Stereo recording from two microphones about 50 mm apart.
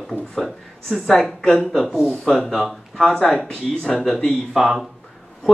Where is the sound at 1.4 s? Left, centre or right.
Centre.